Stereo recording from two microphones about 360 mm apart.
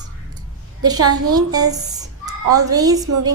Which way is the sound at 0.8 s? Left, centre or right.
Centre.